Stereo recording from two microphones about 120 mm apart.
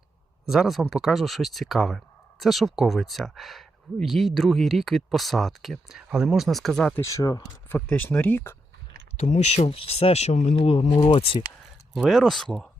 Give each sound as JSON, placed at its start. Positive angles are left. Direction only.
{"t": 0.4, "sound": "speech", "side_deg": -5}
{"t": 6.9, "sound": "speech", "side_deg": 25}
{"t": 7.7, "sound": "speech", "side_deg": 10}
{"t": 9.1, "sound": "speech", "side_deg": 70}
{"t": 10.6, "sound": "speech", "side_deg": 50}
{"t": 11.9, "sound": "speech", "side_deg": 0}